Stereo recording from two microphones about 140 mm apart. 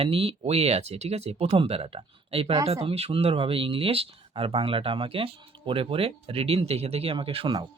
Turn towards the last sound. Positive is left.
turn(degrees=-40)  # may be behind; listen again after turning